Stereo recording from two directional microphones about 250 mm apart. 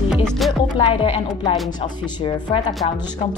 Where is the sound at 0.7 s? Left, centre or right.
Left.